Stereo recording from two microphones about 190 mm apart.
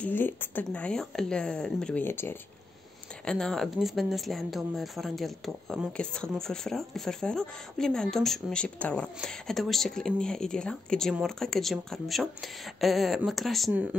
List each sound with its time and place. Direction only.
0.0 s speech: 10° left (ahead or behind)